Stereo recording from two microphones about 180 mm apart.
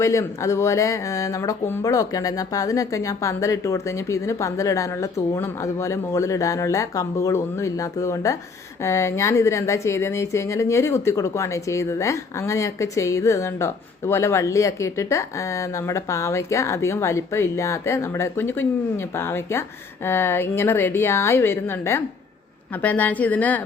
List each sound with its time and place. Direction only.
0.0 s speech: 15° left (ahead or behind)